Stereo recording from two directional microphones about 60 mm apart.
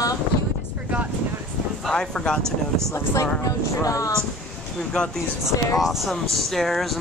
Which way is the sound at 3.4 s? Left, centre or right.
Left.